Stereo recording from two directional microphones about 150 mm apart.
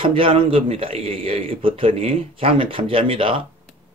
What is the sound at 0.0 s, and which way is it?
Speech, 35° right (ahead or behind).